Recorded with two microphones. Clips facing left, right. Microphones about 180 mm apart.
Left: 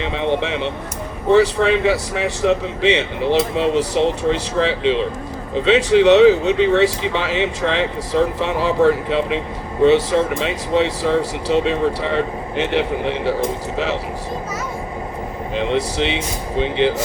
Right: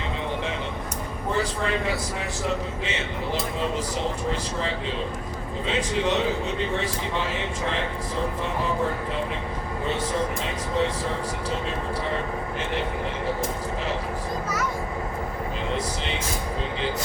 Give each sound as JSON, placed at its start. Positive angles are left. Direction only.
{"t": 0.0, "sound": "a sound", "side_deg": 80}
{"t": 1.3, "sound": "speech", "side_deg": 80}
{"t": 15.5, "sound": "a man's voice", "side_deg": 75}